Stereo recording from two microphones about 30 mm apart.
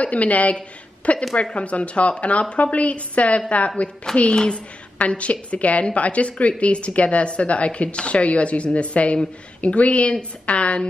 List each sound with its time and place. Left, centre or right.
0.0 s a woman's voice: left
1.3 s a woman's voice: left